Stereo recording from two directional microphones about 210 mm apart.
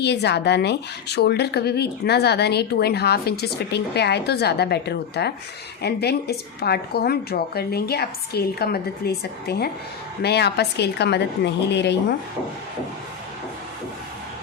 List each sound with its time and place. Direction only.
0.0 s speech: 55° left (ahead or behind)